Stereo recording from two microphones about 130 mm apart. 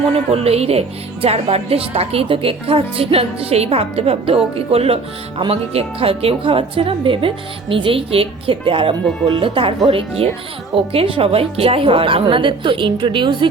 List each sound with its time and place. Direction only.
0.1 s a woman's voice: 50° right (ahead or behind)